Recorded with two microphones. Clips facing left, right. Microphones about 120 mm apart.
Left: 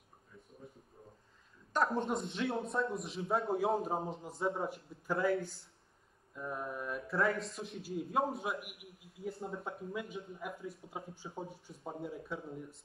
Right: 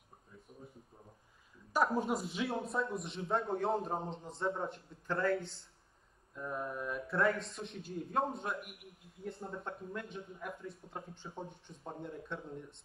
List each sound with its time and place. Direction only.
1.7 s speech: 5° right (ahead or behind)